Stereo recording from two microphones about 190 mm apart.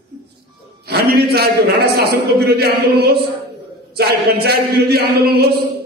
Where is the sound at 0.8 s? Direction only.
55° right (ahead or behind).